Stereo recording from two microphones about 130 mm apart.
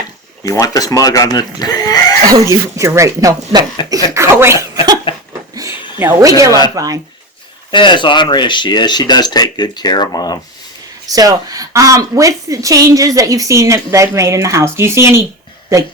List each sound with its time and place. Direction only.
0.6 s speech: 25° left (ahead or behind)
2.3 s a woman's voice: 25° right (ahead or behind)
3.8 s speech: 35° left (ahead or behind)
4.1 s a woman's voice: 20° right (ahead or behind)
5.1 s laughter: 45° left (ahead or behind)
6.0 s a woman's voice: 20° right (ahead or behind)
7.7 s speech: 40° left (ahead or behind)
11.1 s a woman's voice: 25° right (ahead or behind)